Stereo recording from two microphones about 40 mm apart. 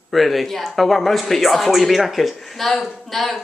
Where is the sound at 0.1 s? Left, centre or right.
Centre.